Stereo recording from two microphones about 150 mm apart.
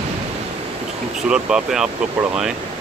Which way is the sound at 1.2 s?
5° right (ahead or behind).